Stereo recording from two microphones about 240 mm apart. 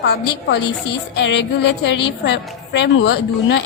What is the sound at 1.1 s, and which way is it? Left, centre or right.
A woman's voice, left.